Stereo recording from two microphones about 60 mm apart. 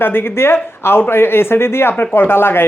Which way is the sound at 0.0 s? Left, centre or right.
Left.